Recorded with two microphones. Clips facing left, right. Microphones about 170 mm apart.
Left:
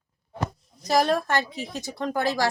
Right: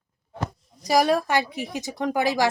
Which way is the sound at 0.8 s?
10° right (ahead or behind).